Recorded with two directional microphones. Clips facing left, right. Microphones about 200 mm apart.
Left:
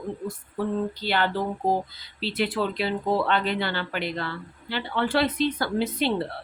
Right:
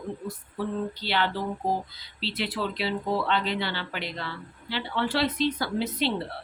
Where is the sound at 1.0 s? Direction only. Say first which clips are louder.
Left 2 dB; 50° left (ahead or behind).